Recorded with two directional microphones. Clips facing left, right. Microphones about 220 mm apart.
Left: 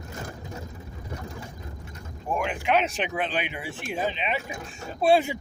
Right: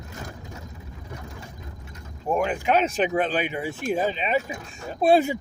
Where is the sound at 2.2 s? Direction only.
40° right (ahead or behind).